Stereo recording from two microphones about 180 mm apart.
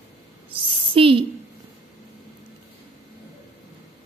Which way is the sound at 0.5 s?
30° right (ahead or behind).